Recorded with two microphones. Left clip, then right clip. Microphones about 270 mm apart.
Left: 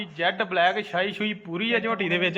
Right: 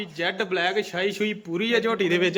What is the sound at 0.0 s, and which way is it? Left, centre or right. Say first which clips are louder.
A man's voice: left 1 dB; centre.